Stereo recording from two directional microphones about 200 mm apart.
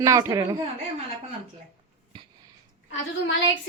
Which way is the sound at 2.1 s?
25° right (ahead or behind).